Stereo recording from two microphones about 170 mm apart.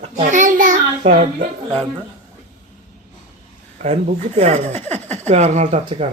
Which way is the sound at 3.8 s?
40° right (ahead or behind).